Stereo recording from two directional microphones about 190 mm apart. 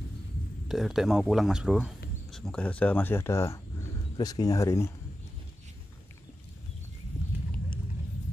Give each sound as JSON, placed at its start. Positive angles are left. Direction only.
{"t": 0.7, "sound": "speech", "side_deg": 0}